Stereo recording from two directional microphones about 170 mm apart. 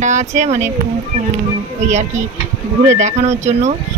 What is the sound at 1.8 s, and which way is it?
Speech, 45° right (ahead or behind).